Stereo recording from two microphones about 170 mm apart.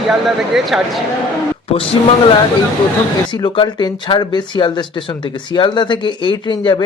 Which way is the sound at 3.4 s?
25° left (ahead or behind).